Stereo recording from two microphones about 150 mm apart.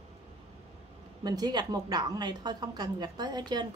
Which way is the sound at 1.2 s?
25° right (ahead or behind).